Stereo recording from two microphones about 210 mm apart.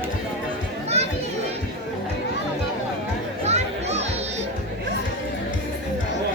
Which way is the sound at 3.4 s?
30° right (ahead or behind).